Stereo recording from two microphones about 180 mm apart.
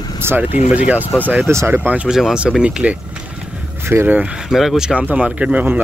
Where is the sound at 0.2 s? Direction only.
15° right (ahead or behind).